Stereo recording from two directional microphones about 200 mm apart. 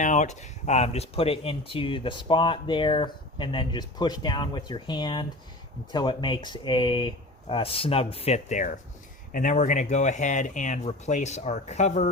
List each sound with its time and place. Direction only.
0.0 s speech: 35° left (ahead or behind)